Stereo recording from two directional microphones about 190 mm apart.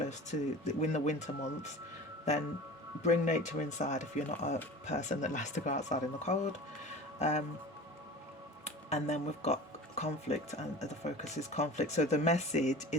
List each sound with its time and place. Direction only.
0.0 s speech: 40° left (ahead or behind)
3.0 s speech: 40° left (ahead or behind)
8.6 s speech: 35° left (ahead or behind)